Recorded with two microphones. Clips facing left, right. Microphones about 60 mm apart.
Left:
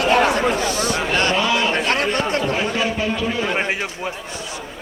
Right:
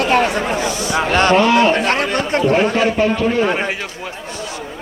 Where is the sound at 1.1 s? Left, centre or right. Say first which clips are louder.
Right 8 dB; right.